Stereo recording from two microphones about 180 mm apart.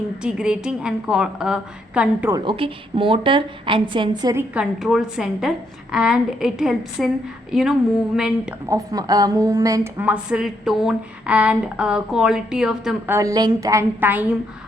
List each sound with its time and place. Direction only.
0.2 s a woman's voice: 5° right (ahead or behind)
2.3 s a woman's voice: 25° right (ahead or behind)
4.5 s a woman's voice: centre (ahead or behind)
8.7 s a woman's voice: 20° right (ahead or behind); by 13.1 s 5° right (ahead or behind)
13.1 s a woman's voice: 20° right (ahead or behind)